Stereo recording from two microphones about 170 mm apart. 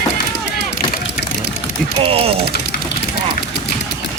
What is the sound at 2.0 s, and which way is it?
Ratchet, 35° right (ahead or behind).